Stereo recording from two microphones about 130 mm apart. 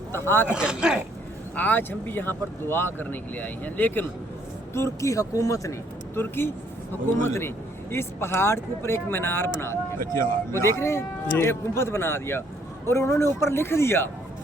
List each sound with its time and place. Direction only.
0.1 s speech: 20° left (ahead or behind)
0.4 s speech: 5° right (ahead or behind)
1.5 s speech: 15° left (ahead or behind)
10.0 s speech: 90° right
10.5 s speech: 20° left (ahead or behind)